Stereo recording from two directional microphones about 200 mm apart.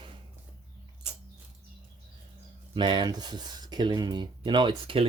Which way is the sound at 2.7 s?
25° right (ahead or behind).